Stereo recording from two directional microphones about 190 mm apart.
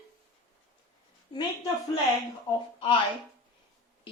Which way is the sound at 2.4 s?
30° left (ahead or behind).